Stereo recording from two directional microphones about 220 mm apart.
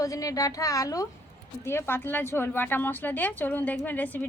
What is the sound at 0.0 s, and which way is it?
A woman's voice, 15° left (ahead or behind).